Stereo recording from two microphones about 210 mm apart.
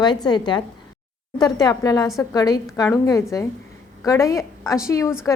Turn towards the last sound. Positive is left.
turn(degrees=15)  # may be behind; listen again after turning